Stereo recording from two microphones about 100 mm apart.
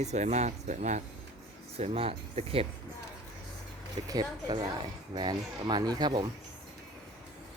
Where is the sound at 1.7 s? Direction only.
80° right.